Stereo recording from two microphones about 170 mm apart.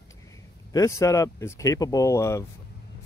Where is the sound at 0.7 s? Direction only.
20° left (ahead or behind).